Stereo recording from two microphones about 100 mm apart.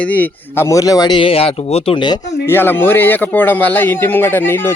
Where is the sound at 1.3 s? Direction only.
80° left.